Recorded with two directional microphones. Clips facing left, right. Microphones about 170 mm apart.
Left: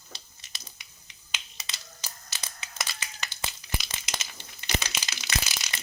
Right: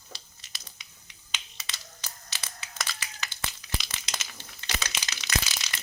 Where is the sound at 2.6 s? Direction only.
20° left (ahead or behind).